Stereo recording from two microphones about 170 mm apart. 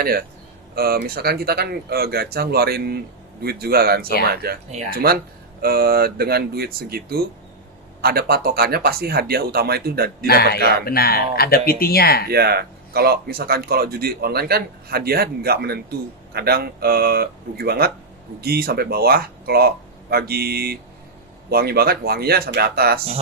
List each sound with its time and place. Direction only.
0.0 s speech: 60° right (ahead or behind)
10.2 s a man's voice: 70° left (ahead or behind)
12.3 s speech: 70° right (ahead or behind)